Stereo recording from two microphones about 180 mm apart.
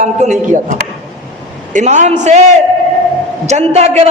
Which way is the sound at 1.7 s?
40° right (ahead or behind).